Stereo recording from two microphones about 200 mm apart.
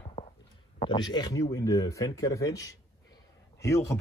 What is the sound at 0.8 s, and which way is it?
Speech, 20° left (ahead or behind).